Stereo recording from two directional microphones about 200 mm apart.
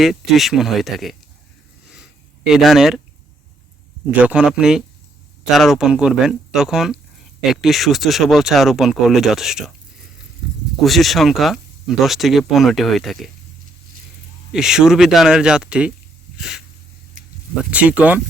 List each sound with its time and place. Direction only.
0.0 s speech: centre (ahead or behind)
2.5 s speech: centre (ahead or behind)
4.2 s speech: 5° right (ahead or behind)
10.8 s speech: centre (ahead or behind)
14.5 s speech: 5° right (ahead or behind)
16.4 s a sound: centre (ahead or behind)
17.2 s a sound: 40° right (ahead or behind)
17.7 s speech: 5° right (ahead or behind)